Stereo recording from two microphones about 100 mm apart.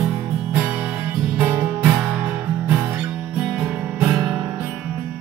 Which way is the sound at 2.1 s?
15° right (ahead or behind).